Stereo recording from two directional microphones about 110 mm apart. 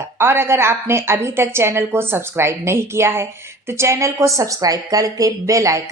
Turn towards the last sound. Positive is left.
turn(degrees=-30)  # may be behind; listen again after turning